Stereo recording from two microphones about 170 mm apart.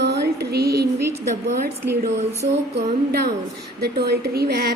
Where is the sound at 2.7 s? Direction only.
70° right (ahead or behind).